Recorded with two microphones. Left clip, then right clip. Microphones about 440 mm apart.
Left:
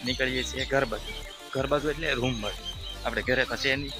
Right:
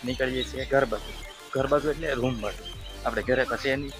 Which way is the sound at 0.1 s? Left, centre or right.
Left.